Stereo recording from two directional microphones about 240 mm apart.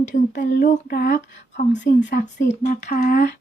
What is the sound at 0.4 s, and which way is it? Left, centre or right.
Speech, left.